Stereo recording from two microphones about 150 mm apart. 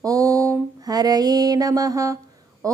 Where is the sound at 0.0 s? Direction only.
20° right (ahead or behind).